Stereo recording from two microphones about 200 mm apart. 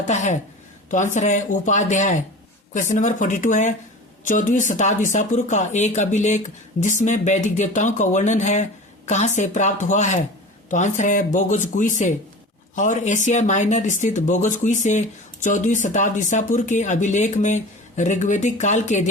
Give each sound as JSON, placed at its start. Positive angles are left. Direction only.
{"t": 0.0, "sound": "speech", "side_deg": 35}